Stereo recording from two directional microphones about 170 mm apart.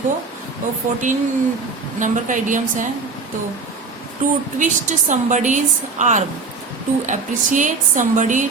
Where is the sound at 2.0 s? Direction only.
50° right (ahead or behind).